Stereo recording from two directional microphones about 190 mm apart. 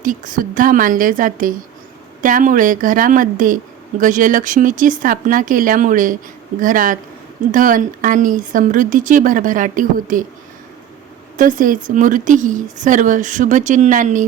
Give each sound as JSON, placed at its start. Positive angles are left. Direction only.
{"t": 0.0, "sound": "speech", "side_deg": -45}
{"t": 11.3, "sound": "speech", "side_deg": -45}